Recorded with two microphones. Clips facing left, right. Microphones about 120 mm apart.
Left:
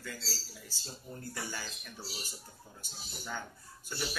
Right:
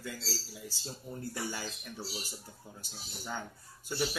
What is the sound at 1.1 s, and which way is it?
Speech, 20° right (ahead or behind).